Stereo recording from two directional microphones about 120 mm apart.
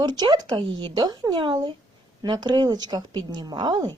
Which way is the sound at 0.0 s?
35° right (ahead or behind).